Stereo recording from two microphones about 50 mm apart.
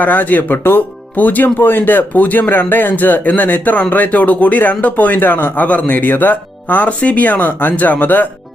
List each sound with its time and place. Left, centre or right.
0.0 s speech: left
1.1 s speech: left